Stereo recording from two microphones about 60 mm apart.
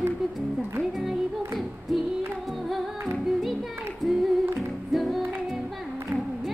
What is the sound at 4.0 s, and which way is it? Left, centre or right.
Music, centre.